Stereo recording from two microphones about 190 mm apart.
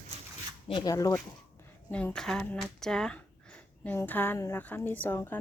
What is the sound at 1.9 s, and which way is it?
Speech, 5° left (ahead or behind).